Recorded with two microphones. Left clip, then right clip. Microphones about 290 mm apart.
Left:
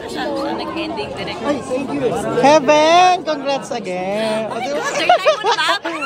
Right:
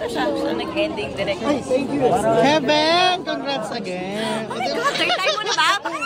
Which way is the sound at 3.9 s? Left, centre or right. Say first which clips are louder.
Left 6 dB; left.